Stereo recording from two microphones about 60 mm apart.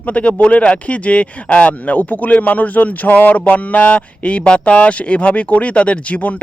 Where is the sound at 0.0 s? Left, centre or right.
Left.